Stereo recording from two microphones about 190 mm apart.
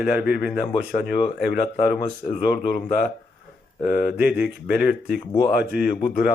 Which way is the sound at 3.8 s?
50° left (ahead or behind).